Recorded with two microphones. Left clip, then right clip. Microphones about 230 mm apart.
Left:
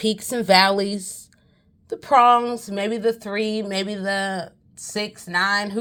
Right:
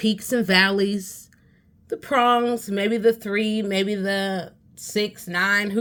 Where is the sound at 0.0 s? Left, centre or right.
Left.